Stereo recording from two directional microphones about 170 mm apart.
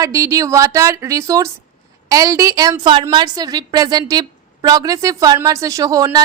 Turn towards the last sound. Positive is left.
turn(degrees=-20)  # may be behind; listen again after turning